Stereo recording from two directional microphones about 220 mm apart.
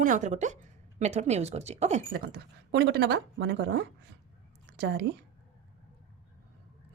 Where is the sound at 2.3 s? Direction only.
50° right (ahead or behind).